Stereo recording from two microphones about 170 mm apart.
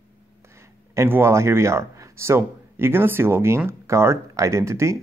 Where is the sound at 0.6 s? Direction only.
15° right (ahead or behind).